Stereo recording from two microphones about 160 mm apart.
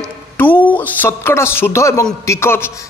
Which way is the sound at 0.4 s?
10° left (ahead or behind).